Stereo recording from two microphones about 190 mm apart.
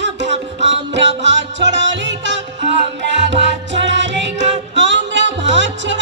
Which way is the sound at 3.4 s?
70° right (ahead or behind).